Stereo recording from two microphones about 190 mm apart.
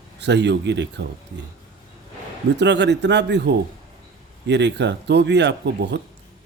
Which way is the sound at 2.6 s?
65° right (ahead or behind).